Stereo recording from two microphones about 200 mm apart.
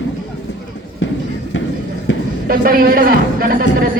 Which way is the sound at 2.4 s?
45° right (ahead or behind).